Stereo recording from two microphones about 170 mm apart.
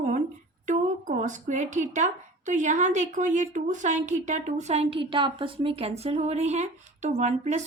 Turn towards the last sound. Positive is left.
turn(degrees=-45)  # may be behind; listen again after turning